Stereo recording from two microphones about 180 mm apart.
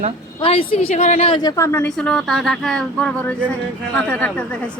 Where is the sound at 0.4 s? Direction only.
30° left (ahead or behind); by 4.4 s 10° left (ahead or behind).